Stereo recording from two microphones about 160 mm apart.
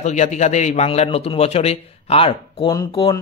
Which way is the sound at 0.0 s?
45° left (ahead or behind).